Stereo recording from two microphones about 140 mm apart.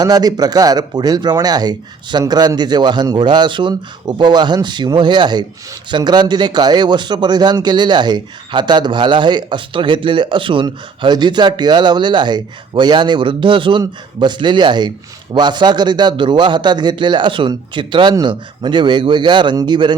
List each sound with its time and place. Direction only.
0.0 s speech: 25° right (ahead or behind)